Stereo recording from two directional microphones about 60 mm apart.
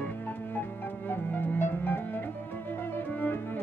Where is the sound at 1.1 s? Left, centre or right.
Left.